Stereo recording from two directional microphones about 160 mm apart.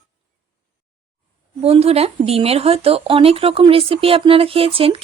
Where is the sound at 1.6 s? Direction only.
40° right (ahead or behind).